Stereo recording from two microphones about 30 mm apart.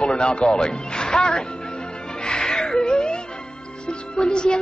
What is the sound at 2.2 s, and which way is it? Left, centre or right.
Music, left.